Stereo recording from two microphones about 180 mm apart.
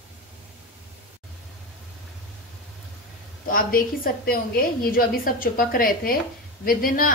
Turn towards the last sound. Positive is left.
turn(degrees=50)  # may be behind; listen again after turning